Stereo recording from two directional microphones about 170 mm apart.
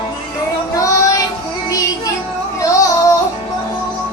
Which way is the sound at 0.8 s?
20° left (ahead or behind).